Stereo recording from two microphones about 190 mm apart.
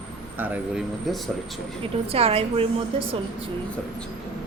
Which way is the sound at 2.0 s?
30° right (ahead or behind).